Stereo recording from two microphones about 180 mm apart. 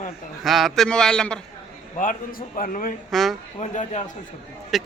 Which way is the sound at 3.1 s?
Centre (ahead or behind).